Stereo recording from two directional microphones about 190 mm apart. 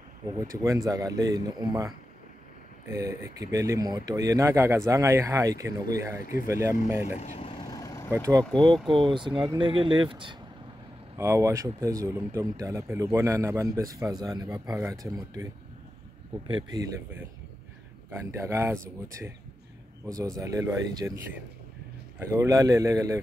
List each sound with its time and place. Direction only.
0.2 s speech: 25° right (ahead or behind)
7.1 s speech: 35° left (ahead or behind)
7.6 s vehicle: 20° left (ahead or behind)
8.5 s speech: 5° left (ahead or behind)
8.8 s speech: 25° right (ahead or behind)
11.1 s speech: 15° right (ahead or behind)
16.4 s speech: 25° right (ahead or behind)
18.1 s speech: 15° right (ahead or behind)
22.3 s speech: 15° right (ahead or behind)